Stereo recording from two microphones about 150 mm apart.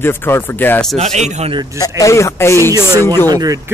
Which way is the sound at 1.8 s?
20° left (ahead or behind).